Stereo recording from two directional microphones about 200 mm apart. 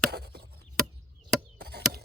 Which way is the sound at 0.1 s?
50° right (ahead or behind).